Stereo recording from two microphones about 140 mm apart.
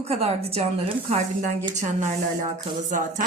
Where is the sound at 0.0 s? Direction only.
45° right (ahead or behind).